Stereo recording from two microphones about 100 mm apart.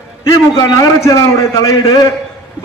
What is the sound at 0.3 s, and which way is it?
A man's voice, 40° left (ahead or behind).